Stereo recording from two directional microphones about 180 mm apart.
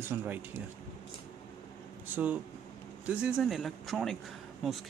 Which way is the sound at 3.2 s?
5° right (ahead or behind).